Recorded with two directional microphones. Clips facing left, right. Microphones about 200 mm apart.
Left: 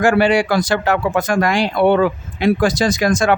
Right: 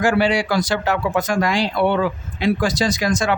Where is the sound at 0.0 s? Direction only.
55° left (ahead or behind).